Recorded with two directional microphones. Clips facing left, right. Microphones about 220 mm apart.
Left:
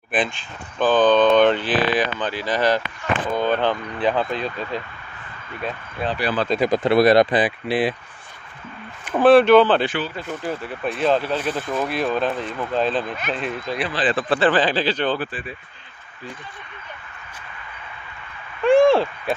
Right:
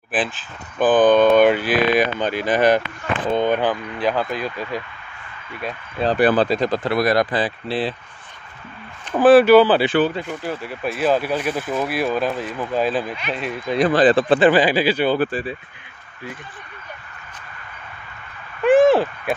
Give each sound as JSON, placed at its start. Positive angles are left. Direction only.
{"t": 0.1, "sound": "speech", "side_deg": -5}
{"t": 6.0, "sound": "speech", "side_deg": -50}
{"t": 6.6, "sound": "speech", "side_deg": 15}
{"t": 6.9, "sound": "speech", "side_deg": 25}
{"t": 9.1, "sound": "speech", "side_deg": -5}
{"t": 13.7, "sound": "speech", "side_deg": -45}
{"t": 14.1, "sound": "speech", "side_deg": -20}
{"t": 14.5, "sound": "speech", "side_deg": -10}
{"t": 18.6, "sound": "a sound", "side_deg": -5}